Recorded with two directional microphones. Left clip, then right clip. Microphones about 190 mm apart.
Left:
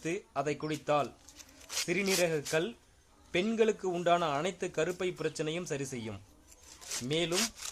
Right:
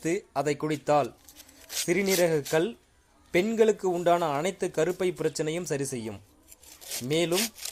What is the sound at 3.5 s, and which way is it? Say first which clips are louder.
Speech: right 6 dB; 15° right (ahead or behind).